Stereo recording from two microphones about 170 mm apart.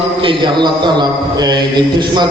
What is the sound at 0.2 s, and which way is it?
A man's voice, 30° right (ahead or behind).